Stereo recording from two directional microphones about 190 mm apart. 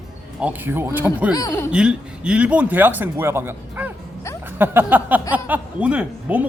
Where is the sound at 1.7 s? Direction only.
5° right (ahead or behind).